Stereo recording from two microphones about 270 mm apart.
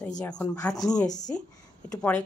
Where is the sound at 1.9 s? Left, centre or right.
Centre.